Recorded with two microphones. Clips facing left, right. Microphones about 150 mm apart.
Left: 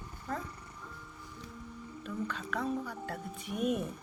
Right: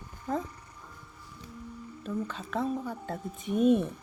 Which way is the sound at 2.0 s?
25° right (ahead or behind).